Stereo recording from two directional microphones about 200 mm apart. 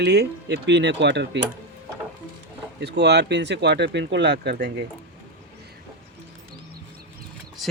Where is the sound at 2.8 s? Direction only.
55° right (ahead or behind).